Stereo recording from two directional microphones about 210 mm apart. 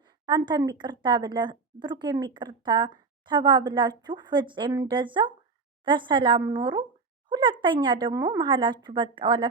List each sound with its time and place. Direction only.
0.3 s speech: 20° right (ahead or behind)
7.3 s a sound: 20° right (ahead or behind)
7.6 s speech: 25° right (ahead or behind)